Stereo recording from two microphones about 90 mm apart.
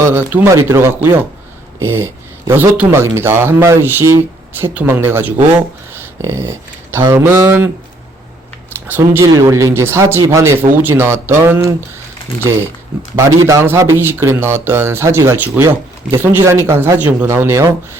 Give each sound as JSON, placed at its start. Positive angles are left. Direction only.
{"t": 0.0, "sound": "speech", "side_deg": -25}
{"t": 8.9, "sound": "speech", "side_deg": -25}
{"t": 13.1, "sound": "speech", "side_deg": -35}